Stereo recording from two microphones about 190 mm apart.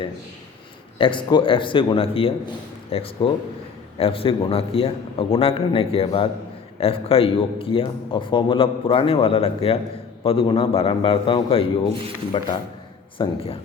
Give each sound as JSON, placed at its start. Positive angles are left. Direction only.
{"t": 0.9, "sound": "a man's voice", "side_deg": 25}